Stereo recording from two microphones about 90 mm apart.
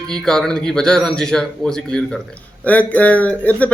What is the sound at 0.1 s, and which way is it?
Speech, 5° left (ahead or behind).